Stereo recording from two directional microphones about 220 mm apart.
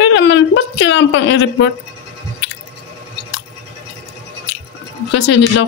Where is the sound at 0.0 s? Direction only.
55° left (ahead or behind).